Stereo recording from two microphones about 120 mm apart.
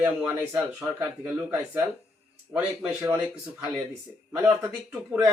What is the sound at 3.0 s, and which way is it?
Speech, 20° right (ahead or behind).